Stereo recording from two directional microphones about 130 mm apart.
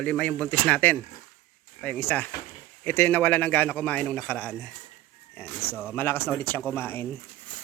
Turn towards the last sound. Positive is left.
turn(degrees=15)  # may be behind; listen again after turning